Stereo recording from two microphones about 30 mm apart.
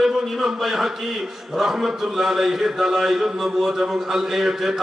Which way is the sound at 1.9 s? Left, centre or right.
Right.